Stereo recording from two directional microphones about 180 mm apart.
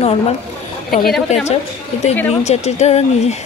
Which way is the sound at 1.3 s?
40° left (ahead or behind).